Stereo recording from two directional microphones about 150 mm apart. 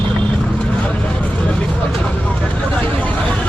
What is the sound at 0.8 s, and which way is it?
Vehicle, 10° left (ahead or behind).